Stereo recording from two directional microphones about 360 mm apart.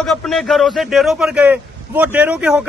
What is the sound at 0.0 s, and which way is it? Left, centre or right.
Speech, centre.